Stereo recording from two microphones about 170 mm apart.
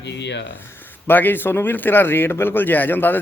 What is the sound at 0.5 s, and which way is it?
Speech, 10° left (ahead or behind).